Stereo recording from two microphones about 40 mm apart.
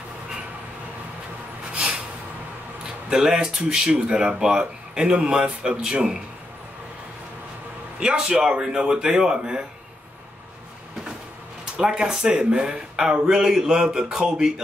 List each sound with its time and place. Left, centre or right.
1.7 s a sound: right
3.1 s speech: centre
8.0 s speech: right
11.7 s speech: right